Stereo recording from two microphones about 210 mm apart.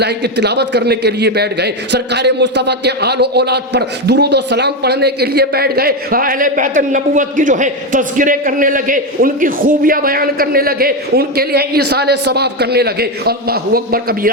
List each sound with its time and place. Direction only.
0.0 s a man's voice: 50° right (ahead or behind)